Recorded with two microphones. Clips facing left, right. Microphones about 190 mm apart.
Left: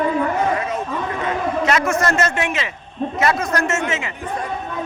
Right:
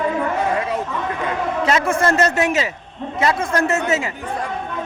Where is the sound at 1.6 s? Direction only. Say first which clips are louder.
Right 2 dB; 30° right (ahead or behind).